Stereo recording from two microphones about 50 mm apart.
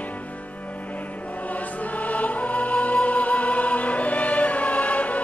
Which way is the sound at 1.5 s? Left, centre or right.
Left.